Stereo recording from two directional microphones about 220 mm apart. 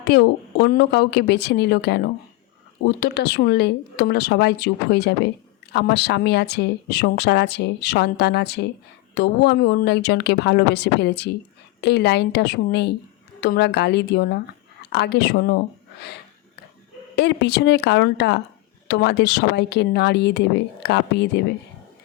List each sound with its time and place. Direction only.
0.0 s speech: 50° left (ahead or behind)
17.2 s speech: 50° left (ahead or behind)